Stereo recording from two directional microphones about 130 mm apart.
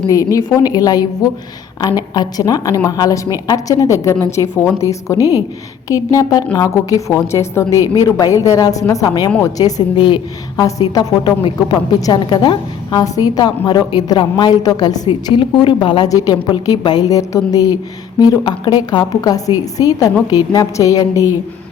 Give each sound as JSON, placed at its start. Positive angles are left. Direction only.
{"t": 0.1, "sound": "a woman's voice", "side_deg": 25}